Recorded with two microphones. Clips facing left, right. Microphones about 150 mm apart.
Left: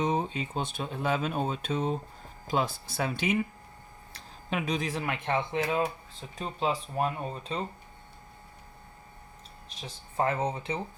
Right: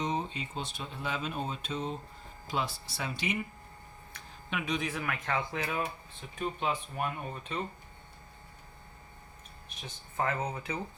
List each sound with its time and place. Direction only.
0.0 s speech: 50° left (ahead or behind)
4.1 s speech: 35° left (ahead or behind)
9.8 s speech: 30° left (ahead or behind)